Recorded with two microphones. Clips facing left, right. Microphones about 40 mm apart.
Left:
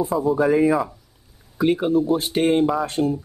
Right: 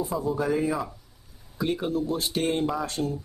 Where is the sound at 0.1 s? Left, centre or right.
Centre.